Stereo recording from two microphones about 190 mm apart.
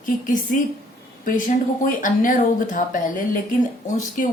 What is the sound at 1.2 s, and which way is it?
A woman's voice, 45° left (ahead or behind).